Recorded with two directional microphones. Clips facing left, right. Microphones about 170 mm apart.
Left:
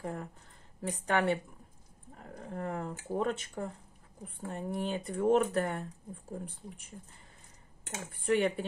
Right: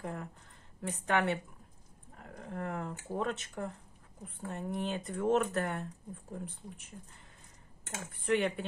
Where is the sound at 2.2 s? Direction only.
30° left (ahead or behind).